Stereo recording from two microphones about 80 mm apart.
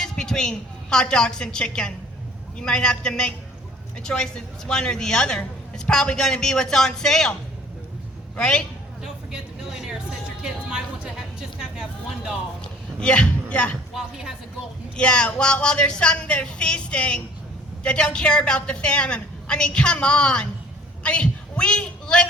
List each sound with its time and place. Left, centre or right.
0.0 s a woman's voice: centre
8.4 s a woman's voice: centre
9.0 s vehicle: centre
9.8 s music: centre
11.6 s a sound: centre
12.6 s a sound: centre
13.9 s speech: centre
14.9 s a woman's voice: centre